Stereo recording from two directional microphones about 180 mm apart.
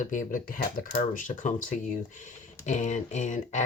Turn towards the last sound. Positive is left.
turn(degrees=40)  # may be behind; listen again after turning